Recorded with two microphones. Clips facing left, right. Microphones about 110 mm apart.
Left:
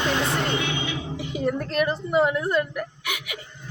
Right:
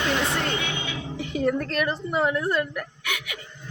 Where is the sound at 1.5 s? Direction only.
25° left (ahead or behind).